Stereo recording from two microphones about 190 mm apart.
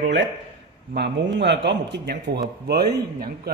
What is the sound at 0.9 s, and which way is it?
A man's voice, 65° right (ahead or behind).